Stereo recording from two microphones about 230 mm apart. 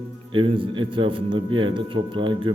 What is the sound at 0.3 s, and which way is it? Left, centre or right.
Speech, right.